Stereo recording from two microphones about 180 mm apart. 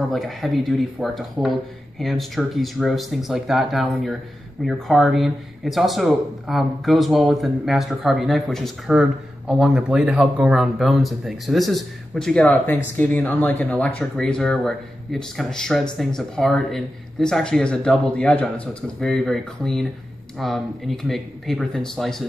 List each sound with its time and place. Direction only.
0.1 s speech: centre (ahead or behind)